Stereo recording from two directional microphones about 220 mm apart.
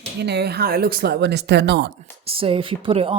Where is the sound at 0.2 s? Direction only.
50° right (ahead or behind).